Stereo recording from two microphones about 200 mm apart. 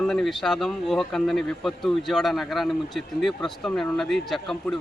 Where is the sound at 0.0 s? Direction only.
Centre (ahead or behind).